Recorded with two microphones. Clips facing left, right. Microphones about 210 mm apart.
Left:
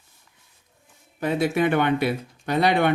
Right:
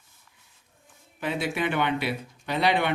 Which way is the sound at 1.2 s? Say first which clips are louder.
Left 6 dB; 45° left (ahead or behind).